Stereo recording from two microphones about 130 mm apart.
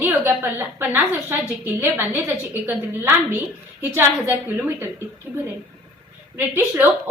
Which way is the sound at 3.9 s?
20° right (ahead or behind).